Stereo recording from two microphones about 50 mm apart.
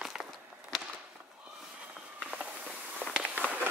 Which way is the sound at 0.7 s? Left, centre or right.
Centre.